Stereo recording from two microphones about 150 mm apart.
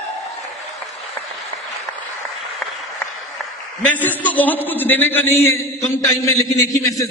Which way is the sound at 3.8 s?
10° left (ahead or behind).